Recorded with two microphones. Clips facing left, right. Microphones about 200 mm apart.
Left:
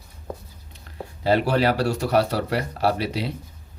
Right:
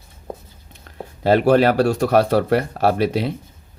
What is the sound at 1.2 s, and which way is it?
Speech, 50° right (ahead or behind).